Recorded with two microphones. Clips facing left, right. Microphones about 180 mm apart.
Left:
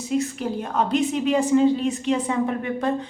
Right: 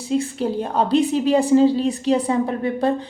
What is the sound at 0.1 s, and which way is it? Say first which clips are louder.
A woman's voice: right 3 dB; 30° right (ahead or behind).